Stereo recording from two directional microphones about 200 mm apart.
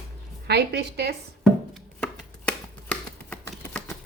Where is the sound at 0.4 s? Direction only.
55° right (ahead or behind).